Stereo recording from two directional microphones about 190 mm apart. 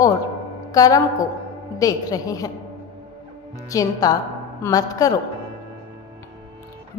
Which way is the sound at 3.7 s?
20° left (ahead or behind).